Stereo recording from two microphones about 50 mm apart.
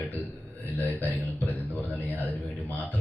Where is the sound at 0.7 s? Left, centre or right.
Left.